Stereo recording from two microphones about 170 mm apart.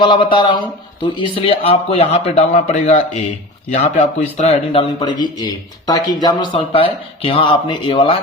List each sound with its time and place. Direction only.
0.0 s speech: 30° left (ahead or behind)